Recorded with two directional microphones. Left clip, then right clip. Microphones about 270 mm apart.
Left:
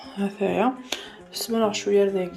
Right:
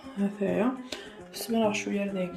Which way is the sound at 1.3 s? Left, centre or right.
Left.